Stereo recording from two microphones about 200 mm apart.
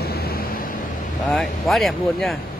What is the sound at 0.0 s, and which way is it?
Vehicle, 50° left (ahead or behind).